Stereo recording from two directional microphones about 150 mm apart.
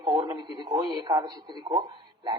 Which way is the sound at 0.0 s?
30° right (ahead or behind).